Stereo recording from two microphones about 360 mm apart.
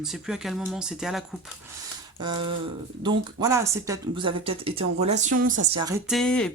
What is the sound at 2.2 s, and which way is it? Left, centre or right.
Speech, centre.